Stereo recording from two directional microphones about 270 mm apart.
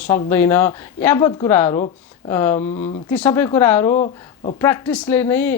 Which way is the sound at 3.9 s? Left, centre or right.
Left.